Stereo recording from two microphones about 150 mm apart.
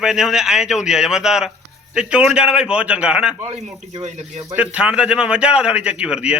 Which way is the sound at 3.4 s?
45° right (ahead or behind).